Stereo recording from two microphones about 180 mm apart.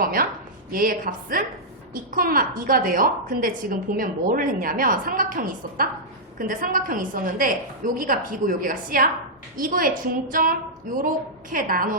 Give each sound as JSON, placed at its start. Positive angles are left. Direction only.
{"t": 0.0, "sound": "a woman's voice", "side_deg": -55}